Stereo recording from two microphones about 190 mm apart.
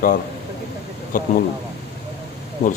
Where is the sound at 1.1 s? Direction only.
45° left (ahead or behind).